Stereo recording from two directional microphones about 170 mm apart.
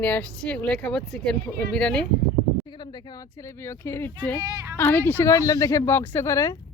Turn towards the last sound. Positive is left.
turn(degrees=20)  # may be behind; listen again after turning